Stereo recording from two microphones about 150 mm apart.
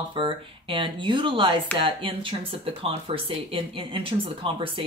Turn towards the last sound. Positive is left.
turn(degrees=-35)  # may be behind; listen again after turning